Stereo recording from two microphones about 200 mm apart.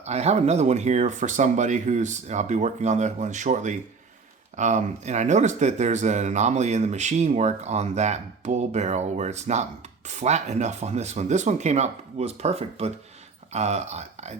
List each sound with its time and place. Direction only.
0.0 s speech: 35° right (ahead or behind)